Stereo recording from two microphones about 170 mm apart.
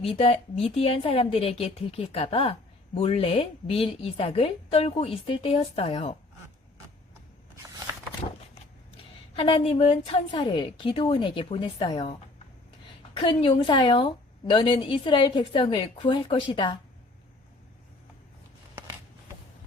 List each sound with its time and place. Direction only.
0.0 s a woman's voice: 35° left (ahead or behind)
9.3 s a woman's voice: 35° left (ahead or behind)
13.2 s a woman's voice: 30° left (ahead or behind)